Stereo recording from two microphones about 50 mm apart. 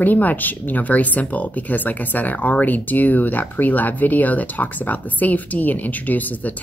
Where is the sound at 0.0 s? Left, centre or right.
Left.